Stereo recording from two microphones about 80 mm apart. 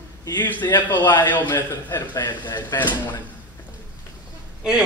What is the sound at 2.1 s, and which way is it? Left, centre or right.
Speech, left.